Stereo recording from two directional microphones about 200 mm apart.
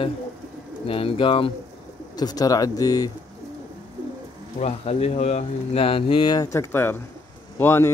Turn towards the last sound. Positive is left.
turn(degrees=10)  # may be behind; listen again after turning